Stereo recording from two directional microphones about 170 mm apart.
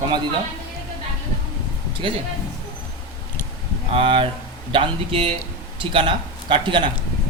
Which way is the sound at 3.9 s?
30° right (ahead or behind).